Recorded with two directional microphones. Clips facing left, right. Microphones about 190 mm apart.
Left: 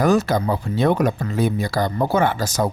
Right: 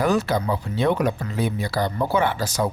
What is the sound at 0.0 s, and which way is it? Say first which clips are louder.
Speech: left 3 dB; 45° left (ahead or behind).